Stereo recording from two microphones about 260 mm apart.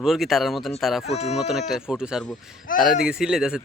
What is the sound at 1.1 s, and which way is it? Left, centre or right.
Speech, left.